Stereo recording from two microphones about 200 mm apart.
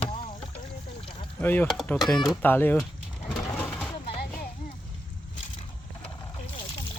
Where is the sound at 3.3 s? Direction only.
5° left (ahead or behind).